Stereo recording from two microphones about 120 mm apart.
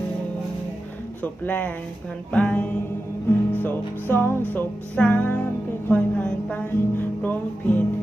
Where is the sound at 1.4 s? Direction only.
15° left (ahead or behind).